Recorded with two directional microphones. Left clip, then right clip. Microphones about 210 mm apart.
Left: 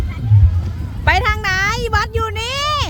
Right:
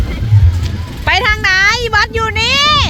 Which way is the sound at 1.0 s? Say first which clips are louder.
Right 4 dB; 15° left (ahead or behind).